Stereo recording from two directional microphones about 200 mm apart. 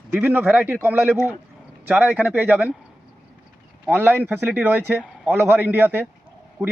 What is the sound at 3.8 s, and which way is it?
A man's voice, 10° right (ahead or behind).